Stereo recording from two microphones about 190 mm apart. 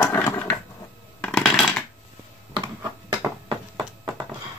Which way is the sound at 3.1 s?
20° right (ahead or behind).